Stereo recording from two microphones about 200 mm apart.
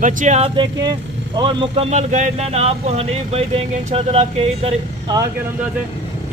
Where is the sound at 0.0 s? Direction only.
35° right (ahead or behind).